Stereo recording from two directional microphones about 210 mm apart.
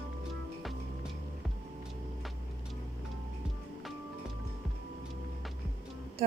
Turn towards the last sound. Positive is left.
turn(degrees=-30)  # may be behind; listen again after turning